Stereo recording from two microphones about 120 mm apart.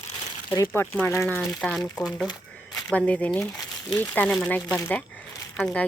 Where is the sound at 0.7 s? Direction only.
20° left (ahead or behind).